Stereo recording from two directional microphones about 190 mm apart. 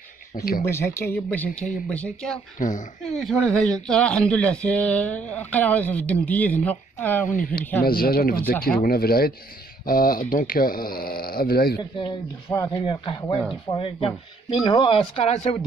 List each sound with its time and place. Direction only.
0.3 s speech: 45° left (ahead or behind)
0.7 s speech: 15° left (ahead or behind)
2.6 s speech: 40° left (ahead or behind)
3.2 s speech: centre (ahead or behind)
7.2 s speech: 45° left (ahead or behind)
12.0 s speech: 20° left (ahead or behind)